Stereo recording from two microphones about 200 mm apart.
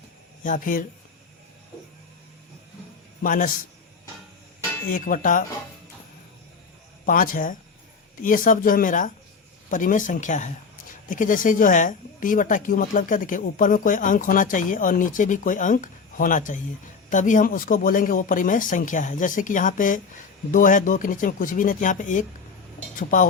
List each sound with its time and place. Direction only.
0.4 s speech: 40° left (ahead or behind)
3.2 s speech: 40° left (ahead or behind)
4.9 s speech: 45° left (ahead or behind)
7.0 s speech: 45° left (ahead or behind)